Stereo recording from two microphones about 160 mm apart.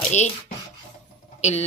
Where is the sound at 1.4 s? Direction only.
45° left (ahead or behind).